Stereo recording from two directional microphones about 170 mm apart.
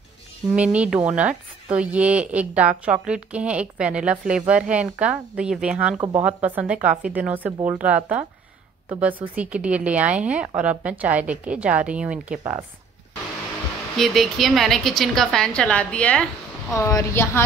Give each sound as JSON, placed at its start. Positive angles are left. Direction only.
{"t": 0.6, "sound": "a woman's voice", "side_deg": -5}
{"t": 13.9, "sound": "a woman's voice", "side_deg": 0}
{"t": 16.7, "sound": "a woman's voice", "side_deg": 15}